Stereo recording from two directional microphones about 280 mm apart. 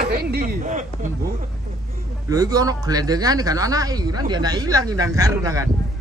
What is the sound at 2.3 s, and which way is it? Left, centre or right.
Speech, centre.